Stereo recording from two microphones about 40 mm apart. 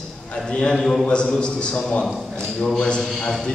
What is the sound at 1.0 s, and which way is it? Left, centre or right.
A man's voice, left.